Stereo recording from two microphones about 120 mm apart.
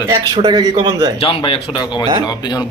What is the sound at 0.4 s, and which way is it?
Speech, 35° right (ahead or behind).